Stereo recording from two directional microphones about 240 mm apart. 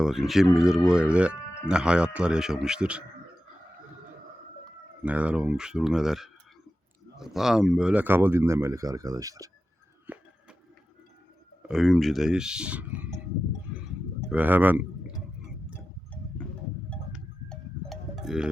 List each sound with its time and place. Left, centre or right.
0.0 s speech: centre
5.0 s speech: centre
10.1 s a sound: centre
11.7 s speech: centre
14.3 s speech: centre
16.9 s livestock: centre